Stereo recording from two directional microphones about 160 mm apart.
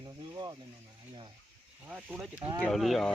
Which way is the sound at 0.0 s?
25° right (ahead or behind).